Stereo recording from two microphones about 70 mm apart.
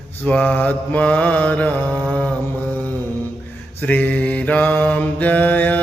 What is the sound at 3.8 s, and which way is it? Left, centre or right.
Mantra, left.